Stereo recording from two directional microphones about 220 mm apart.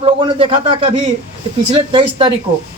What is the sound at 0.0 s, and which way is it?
A man's voice, 25° right (ahead or behind).